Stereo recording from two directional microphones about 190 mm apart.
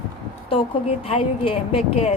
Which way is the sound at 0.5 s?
30° left (ahead or behind).